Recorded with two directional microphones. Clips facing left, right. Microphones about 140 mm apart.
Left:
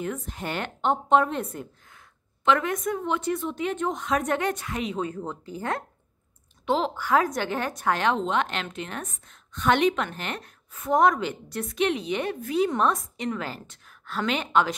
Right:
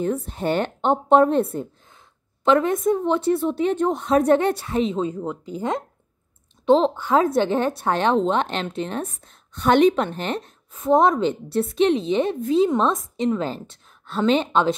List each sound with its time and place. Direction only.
0.0 s speech: 30° right (ahead or behind)
5.1 s a woman's voice: 15° right (ahead or behind)